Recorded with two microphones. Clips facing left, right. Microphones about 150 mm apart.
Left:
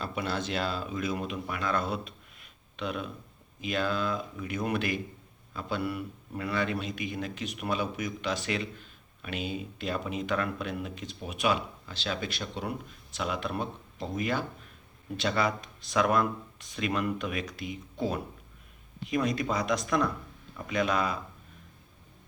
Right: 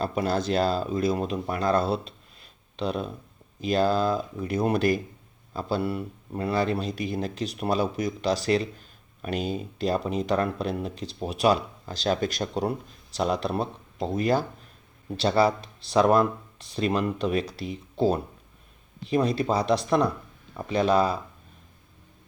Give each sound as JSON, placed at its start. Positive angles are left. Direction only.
{"t": 0.0, "sound": "speech", "side_deg": -40}